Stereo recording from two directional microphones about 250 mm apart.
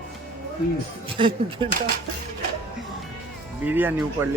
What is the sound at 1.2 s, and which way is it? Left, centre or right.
Speech, centre.